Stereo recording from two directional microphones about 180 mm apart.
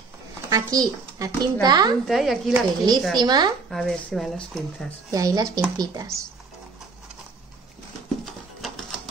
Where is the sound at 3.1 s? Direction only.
20° right (ahead or behind).